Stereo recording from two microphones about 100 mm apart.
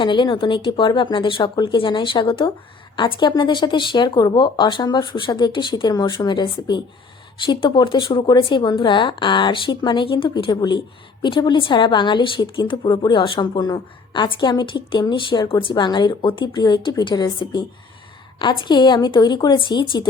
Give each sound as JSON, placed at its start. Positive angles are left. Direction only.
{"t": 0.0, "sound": "speech", "side_deg": 55}